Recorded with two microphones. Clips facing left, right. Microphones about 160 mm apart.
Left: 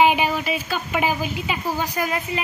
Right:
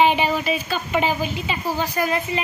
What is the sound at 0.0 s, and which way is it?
A woman's voice, 10° left (ahead or behind).